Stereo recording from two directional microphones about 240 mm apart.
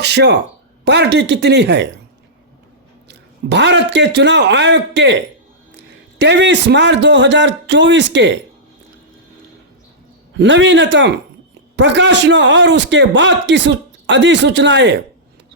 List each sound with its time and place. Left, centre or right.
0.0 s a man's voice: right
3.1 s a man's voice: right
10.3 s a man's voice: right